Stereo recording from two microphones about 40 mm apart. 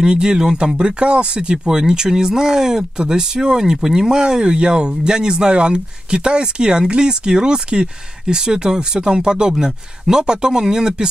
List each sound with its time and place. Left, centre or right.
0.0 s speech: right